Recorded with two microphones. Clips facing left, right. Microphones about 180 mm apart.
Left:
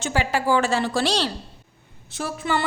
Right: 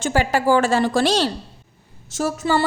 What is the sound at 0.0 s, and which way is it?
A woman's voice, 45° right (ahead or behind).